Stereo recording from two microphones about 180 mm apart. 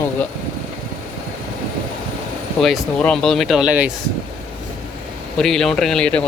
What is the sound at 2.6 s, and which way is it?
Speech, 5° left (ahead or behind).